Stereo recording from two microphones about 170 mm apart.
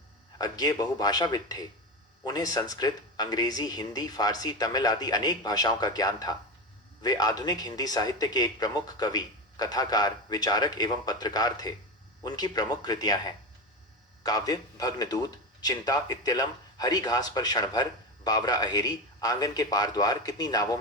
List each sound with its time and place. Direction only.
0.3 s a man's voice: 20° left (ahead or behind)
14.3 s a man's voice: 20° left (ahead or behind)